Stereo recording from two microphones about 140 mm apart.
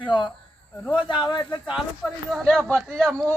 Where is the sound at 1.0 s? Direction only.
35° left (ahead or behind).